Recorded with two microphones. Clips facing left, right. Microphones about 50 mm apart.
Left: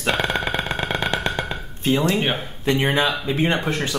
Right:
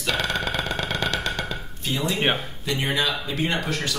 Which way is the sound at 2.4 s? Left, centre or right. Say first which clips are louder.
Left 6 dB; left.